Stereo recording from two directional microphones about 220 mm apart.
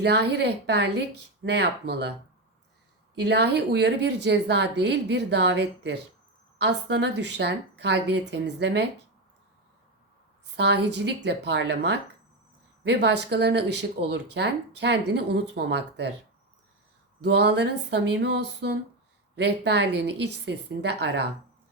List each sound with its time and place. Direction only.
0.0 s speech: 50° right (ahead or behind)
3.2 s speech: 50° right (ahead or behind)
10.4 s speech: 50° right (ahead or behind)
17.2 s speech: 50° right (ahead or behind)